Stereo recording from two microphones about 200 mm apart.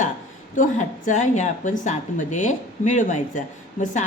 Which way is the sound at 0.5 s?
40° left (ahead or behind).